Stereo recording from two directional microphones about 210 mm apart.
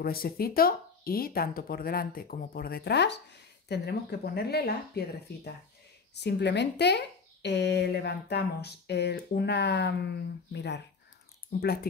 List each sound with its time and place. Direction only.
0.0 s speech: 45° left (ahead or behind)